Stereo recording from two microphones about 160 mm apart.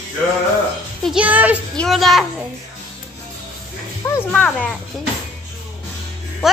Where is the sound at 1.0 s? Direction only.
5° right (ahead or behind).